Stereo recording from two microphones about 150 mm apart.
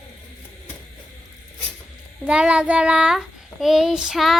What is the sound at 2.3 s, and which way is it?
A child's voice, 5° right (ahead or behind).